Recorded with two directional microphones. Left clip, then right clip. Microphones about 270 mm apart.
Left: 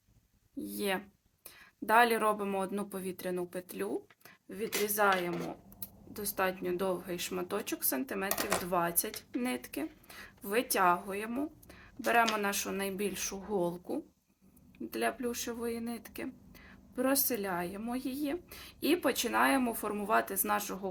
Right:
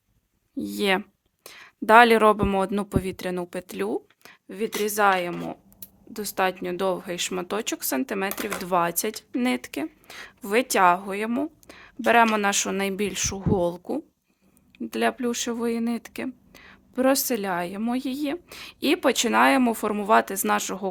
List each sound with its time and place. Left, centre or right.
0.5 s speech: right